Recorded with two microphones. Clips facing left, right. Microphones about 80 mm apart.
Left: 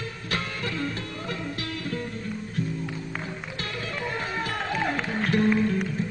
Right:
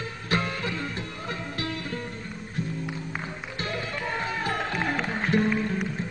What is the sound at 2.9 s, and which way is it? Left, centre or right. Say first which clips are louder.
Music: even; centre.